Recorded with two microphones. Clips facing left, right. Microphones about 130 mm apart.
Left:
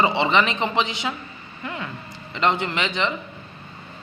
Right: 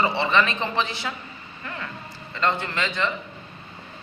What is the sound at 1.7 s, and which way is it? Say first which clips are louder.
Vehicle: left 3 dB; 20° left (ahead or behind).